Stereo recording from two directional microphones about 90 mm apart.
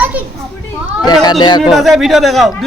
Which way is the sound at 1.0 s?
50° left (ahead or behind).